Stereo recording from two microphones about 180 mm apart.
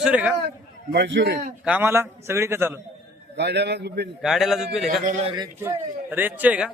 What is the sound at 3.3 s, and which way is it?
Speech, 70° right (ahead or behind).